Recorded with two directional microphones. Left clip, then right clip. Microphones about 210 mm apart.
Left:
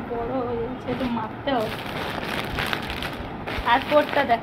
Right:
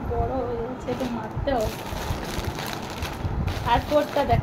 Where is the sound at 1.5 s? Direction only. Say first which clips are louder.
Even; 25° right (ahead or behind).